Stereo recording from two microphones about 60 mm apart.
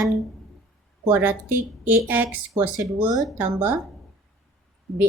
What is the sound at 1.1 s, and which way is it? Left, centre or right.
Speech, right.